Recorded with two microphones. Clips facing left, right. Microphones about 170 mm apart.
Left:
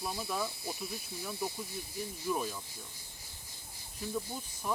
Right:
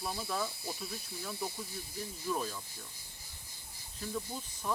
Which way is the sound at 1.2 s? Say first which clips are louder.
Left 2 dB; 5° left (ahead or behind).